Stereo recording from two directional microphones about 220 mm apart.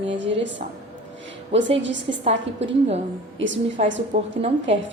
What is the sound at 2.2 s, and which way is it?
Speech, 30° right (ahead or behind).